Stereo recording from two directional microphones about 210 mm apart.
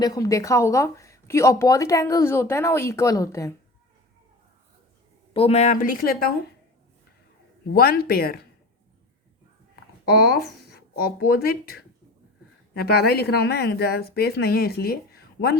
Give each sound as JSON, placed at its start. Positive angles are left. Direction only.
{"t": 0.0, "sound": "speech", "side_deg": 15}
{"t": 5.3, "sound": "speech", "side_deg": 30}
{"t": 7.7, "sound": "speech", "side_deg": 45}
{"t": 10.3, "sound": "speech", "side_deg": 0}
{"t": 10.7, "sound": "speech", "side_deg": 45}